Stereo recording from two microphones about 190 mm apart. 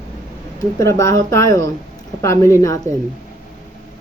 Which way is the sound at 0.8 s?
15° left (ahead or behind).